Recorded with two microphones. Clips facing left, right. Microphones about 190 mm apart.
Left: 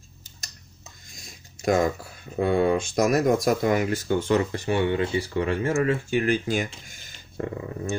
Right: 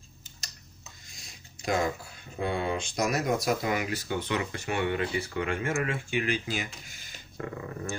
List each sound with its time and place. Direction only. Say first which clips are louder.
2.4 s speech: left 8 dB; 50° left (ahead or behind)
7.3 s speech: left 5 dB; 25° left (ahead or behind)